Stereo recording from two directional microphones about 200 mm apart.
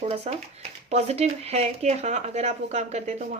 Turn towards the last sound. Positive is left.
turn(degrees=-35)  # may be behind; listen again after turning